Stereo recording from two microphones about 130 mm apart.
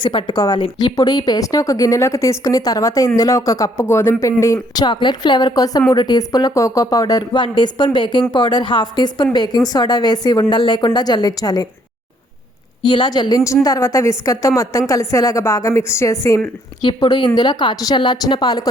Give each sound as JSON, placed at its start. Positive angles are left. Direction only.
{"t": 0.0, "sound": "a woman's voice", "side_deg": 40}
{"t": 12.8, "sound": "a woman's voice", "side_deg": 35}
{"t": 16.8, "sound": "a woman's voice", "side_deg": 35}